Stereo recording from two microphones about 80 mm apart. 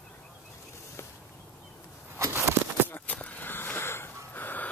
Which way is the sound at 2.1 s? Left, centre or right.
Right.